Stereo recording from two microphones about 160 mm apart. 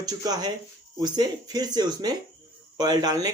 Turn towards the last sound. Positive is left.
turn(degrees=-25)  # may be behind; listen again after turning